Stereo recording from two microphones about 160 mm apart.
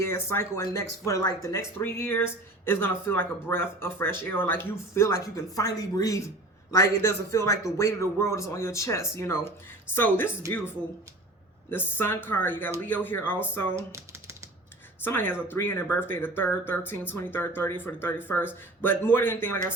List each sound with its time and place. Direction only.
0.0 s speech: 15° left (ahead or behind)
11.7 s speech: 15° left (ahead or behind)
13.7 s typing: 15° right (ahead or behind)
15.0 s speech: 15° left (ahead or behind)